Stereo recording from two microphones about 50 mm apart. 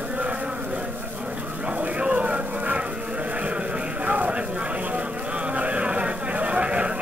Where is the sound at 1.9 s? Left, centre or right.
Right.